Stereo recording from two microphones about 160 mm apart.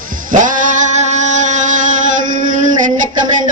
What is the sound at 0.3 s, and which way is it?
Music, 55° right (ahead or behind).